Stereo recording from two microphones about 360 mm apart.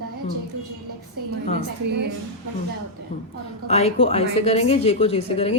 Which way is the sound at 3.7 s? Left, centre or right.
Centre.